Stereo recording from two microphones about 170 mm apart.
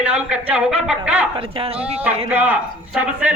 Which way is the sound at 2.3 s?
10° right (ahead or behind).